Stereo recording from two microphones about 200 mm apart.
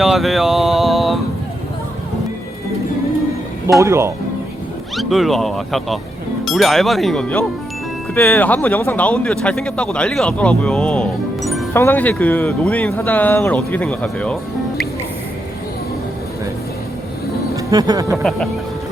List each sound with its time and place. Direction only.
0.0 s a sound: centre (ahead or behind)
3.8 s speech: 15° right (ahead or behind)
4.9 s speech: centre (ahead or behind)
11.7 s speech: 10° left (ahead or behind)
17.7 s speech: 20° right (ahead or behind)
18.2 s speech: centre (ahead or behind)